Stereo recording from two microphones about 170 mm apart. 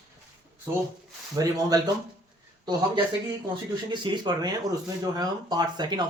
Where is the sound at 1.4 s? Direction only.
20° right (ahead or behind).